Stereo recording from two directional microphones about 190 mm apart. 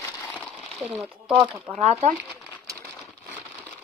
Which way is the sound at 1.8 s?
35° right (ahead or behind).